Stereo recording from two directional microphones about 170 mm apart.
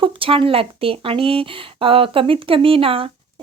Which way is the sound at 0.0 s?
30° right (ahead or behind).